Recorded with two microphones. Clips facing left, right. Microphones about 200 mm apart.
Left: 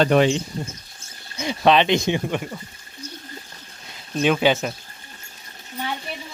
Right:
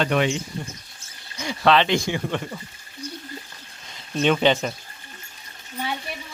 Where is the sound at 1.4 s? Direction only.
20° left (ahead or behind).